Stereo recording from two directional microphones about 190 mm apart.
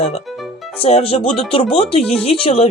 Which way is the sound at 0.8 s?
30° left (ahead or behind).